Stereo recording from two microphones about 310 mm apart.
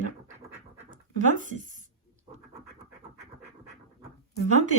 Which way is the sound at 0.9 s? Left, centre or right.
Right.